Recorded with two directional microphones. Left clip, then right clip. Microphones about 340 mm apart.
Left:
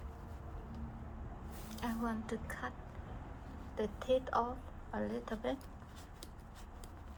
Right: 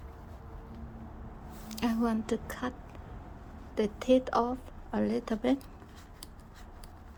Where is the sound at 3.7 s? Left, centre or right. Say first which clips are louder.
Right 8 dB; right.